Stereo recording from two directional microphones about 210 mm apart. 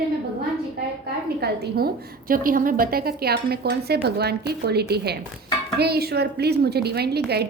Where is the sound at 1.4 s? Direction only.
50° right (ahead or behind).